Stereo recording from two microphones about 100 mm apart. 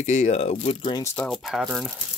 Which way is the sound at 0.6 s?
90° left.